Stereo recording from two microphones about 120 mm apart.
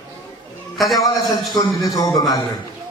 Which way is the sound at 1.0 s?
35° left (ahead or behind).